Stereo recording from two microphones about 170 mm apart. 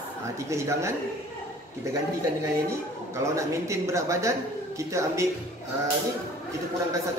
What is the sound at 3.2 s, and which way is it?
A man's voice, 15° right (ahead or behind).